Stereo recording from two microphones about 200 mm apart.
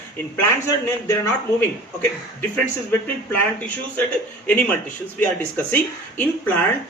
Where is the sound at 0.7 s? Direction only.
15° left (ahead or behind).